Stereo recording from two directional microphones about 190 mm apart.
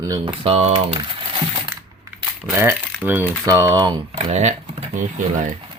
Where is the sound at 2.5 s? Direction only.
10° right (ahead or behind); by 4.8 s 35° right (ahead or behind).